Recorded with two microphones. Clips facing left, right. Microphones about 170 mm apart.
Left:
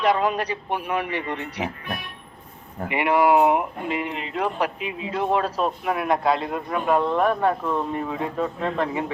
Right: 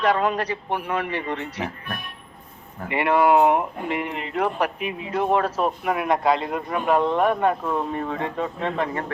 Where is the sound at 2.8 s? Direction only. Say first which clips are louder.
Even; 15° left (ahead or behind).